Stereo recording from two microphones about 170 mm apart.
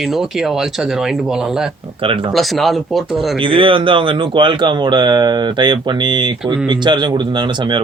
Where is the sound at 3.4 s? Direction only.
30° right (ahead or behind).